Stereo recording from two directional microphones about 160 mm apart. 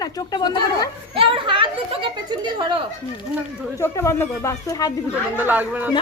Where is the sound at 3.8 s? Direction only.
15° left (ahead or behind).